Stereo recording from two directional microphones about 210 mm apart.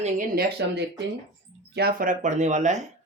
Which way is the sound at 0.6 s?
55° right (ahead or behind).